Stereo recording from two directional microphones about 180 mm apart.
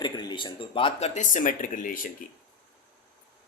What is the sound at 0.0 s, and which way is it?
Speech, 25° left (ahead or behind).